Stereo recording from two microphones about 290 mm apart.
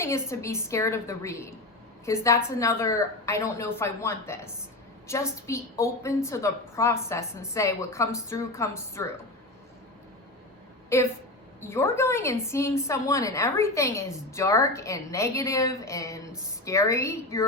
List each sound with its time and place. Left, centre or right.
0.0 s a woman's voice: centre
10.9 s a woman's voice: centre